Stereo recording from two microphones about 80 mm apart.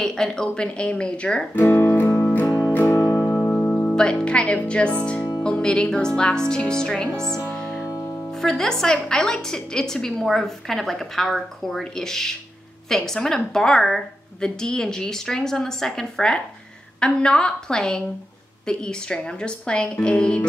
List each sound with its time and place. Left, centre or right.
0.0 s a woman's voice: centre
1.6 s speech: left
2.2 s music: left
3.1 s music: centre
3.4 s music: centre
3.9 s a woman's voice: centre
8.3 s a woman's voice: centre